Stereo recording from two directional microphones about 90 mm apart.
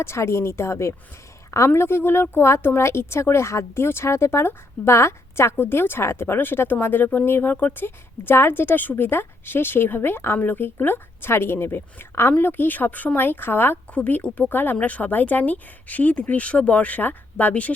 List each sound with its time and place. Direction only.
0.0 s speech: 30° left (ahead or behind)